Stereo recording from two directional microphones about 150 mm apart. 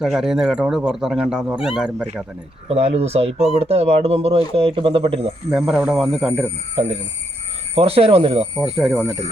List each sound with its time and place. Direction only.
0.0 s speech: 5° right (ahead or behind)
2.6 s speech: 45° right (ahead or behind)
5.5 s speech: 10° right (ahead or behind)
6.8 s speech: 35° right (ahead or behind)
8.6 s speech: 5° right (ahead or behind)